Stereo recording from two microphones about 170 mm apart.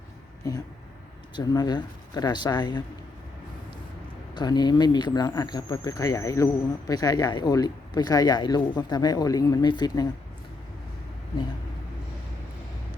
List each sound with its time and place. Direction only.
0.4 s speech: 20° left (ahead or behind)
4.4 s speech: 25° left (ahead or behind)